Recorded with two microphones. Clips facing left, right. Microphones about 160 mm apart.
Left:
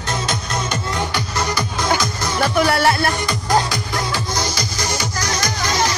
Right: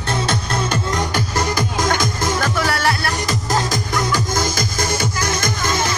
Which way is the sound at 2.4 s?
20° left (ahead or behind).